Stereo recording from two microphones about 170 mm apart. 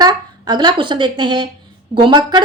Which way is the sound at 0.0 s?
25° right (ahead or behind).